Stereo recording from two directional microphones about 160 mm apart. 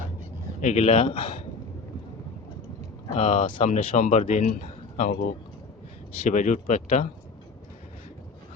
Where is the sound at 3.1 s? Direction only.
35° left (ahead or behind).